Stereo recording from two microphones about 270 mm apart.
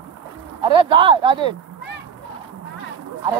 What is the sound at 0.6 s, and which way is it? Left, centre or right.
Speech, centre.